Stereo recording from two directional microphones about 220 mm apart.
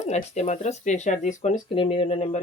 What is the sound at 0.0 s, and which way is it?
Speech, 30° left (ahead or behind).